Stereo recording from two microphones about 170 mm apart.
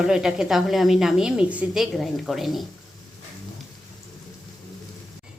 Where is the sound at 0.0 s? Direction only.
5° right (ahead or behind).